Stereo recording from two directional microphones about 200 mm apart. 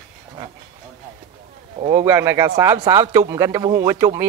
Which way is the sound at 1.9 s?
15° right (ahead or behind).